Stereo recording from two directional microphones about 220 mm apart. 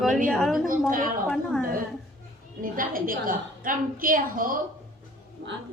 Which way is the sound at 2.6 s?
40° right (ahead or behind).